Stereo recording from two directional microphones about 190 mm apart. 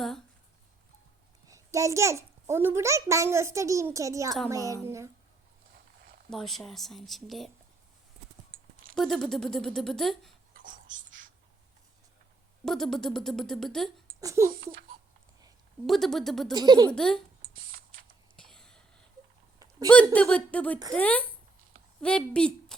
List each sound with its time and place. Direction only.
1.5 s a child's voice: 15° right (ahead or behind)
5.7 s a sound: 50° right (ahead or behind)
6.3 s a woman's voice: centre (ahead or behind)
9.0 s a woman's voice: centre (ahead or behind)
10.6 s a sound: 45° right (ahead or behind)
12.6 s a woman's voice: centre (ahead or behind)
14.2 s speech: 15° right (ahead or behind)
15.9 s a woman's voice: centre (ahead or behind)
16.5 s speech: 20° right (ahead or behind)
16.9 s a woman's voice: 5° left (ahead or behind)
17.5 s a sound: 50° right (ahead or behind)
18.3 s whispering: 5° left (ahead or behind)
20.1 s a woman's voice: 5° left (ahead or behind)